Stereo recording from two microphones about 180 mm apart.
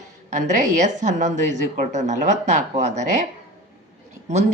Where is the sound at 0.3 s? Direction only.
40° right (ahead or behind).